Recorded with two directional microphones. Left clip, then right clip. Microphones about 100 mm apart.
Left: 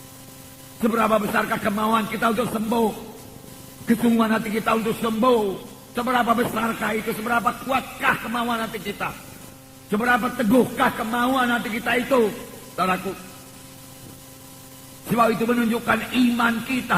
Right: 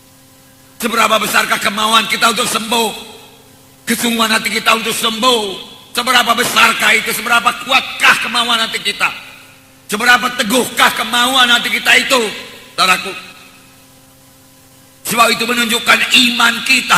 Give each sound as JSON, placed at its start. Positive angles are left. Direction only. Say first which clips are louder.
{"t": 0.8, "sound": "a man's voice", "louder": "right 8 dB", "side_deg": 25}
{"t": 15.1, "sound": "a man's voice", "louder": "right 8 dB", "side_deg": 20}